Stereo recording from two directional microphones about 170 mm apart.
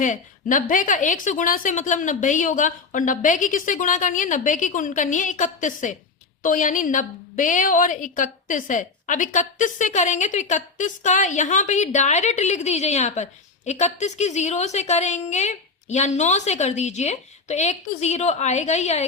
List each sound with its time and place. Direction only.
0.0 s a woman's voice: 50° left (ahead or behind)